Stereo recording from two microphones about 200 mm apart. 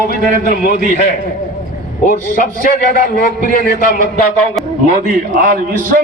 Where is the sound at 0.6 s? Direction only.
50° left (ahead or behind).